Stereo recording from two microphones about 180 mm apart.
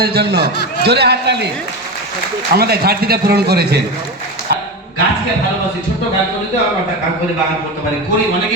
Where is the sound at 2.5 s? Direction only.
60° right (ahead or behind).